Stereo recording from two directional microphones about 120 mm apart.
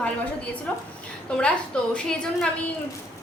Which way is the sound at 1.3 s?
10° left (ahead or behind).